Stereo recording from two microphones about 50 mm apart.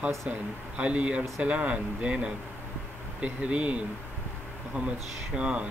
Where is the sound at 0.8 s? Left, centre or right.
Right.